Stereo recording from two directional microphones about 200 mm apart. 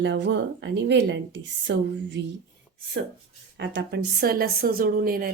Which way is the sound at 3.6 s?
60° right (ahead or behind).